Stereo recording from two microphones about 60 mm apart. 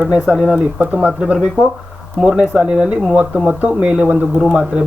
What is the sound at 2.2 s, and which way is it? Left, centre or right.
Speech, centre.